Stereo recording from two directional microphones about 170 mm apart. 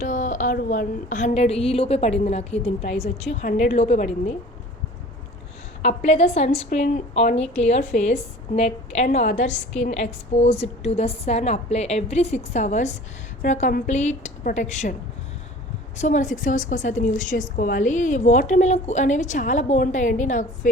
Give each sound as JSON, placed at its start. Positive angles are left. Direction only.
{"t": 0.0, "sound": "speech", "side_deg": 45}
{"t": 5.8, "sound": "a woman's voice", "side_deg": 45}
{"t": 16.0, "sound": "a woman's voice", "side_deg": 45}